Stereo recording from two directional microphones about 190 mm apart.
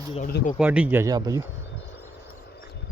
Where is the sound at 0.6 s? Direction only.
5° right (ahead or behind).